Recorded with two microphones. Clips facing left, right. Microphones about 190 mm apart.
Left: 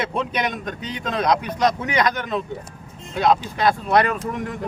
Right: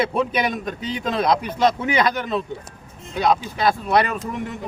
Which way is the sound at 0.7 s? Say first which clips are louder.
Right 2 dB; 30° right (ahead or behind).